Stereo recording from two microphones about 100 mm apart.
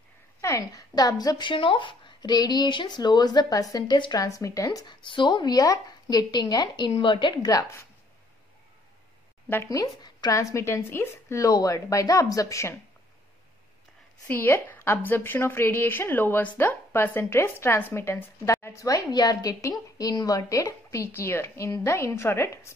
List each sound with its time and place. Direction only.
0.4 s speech: 30° left (ahead or behind)
4.8 s speech: 55° left (ahead or behind)
6.9 s a woman's voice: 60° left (ahead or behind)
9.7 s speech: 40° left (ahead or behind)
14.2 s speech: 20° left (ahead or behind)